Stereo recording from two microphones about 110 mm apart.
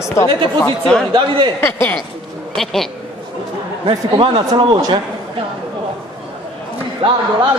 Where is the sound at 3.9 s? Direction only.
50° right (ahead or behind).